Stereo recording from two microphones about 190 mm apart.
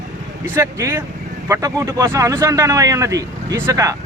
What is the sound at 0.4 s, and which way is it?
Speech, 15° right (ahead or behind).